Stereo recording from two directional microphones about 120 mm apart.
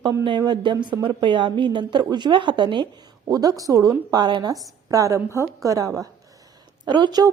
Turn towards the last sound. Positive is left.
turn(degrees=-35)  # may be behind; listen again after turning